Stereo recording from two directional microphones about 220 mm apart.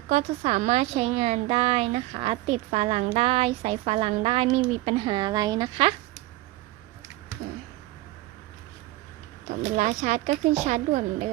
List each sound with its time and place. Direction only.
0.1 s a woman's voice: 30° right (ahead or behind)
9.7 s a woman's voice: 35° right (ahead or behind)